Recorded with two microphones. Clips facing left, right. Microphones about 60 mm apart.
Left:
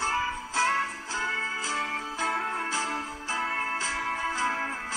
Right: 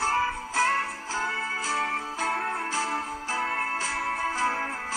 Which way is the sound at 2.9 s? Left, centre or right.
Right.